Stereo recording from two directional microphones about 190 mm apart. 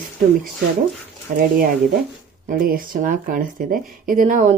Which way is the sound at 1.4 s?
45° right (ahead or behind).